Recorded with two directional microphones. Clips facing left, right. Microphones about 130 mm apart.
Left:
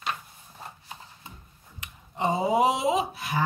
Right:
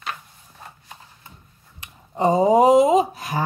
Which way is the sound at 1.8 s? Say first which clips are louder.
Right 7 dB; 40° right (ahead or behind).